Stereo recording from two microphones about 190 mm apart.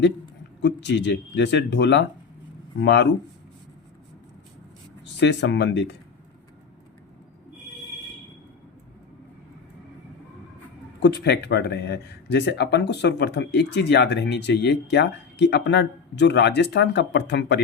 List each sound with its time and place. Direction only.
0.6 s speech: 65° left (ahead or behind)
5.0 s speech: 65° left (ahead or behind)
11.0 s speech: 65° left (ahead or behind)